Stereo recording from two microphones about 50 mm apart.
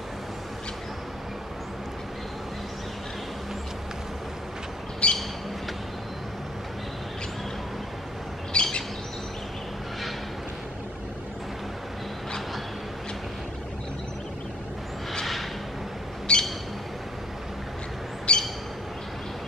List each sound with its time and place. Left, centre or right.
5.0 s squawk: left
8.5 s bird: centre
16.3 s bird: centre
18.3 s a sound: left